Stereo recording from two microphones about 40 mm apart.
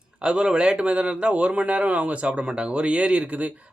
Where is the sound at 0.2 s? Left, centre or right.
Right.